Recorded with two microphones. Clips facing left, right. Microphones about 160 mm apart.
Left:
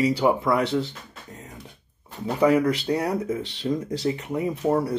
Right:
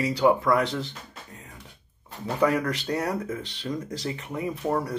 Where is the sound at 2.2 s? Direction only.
15° left (ahead or behind).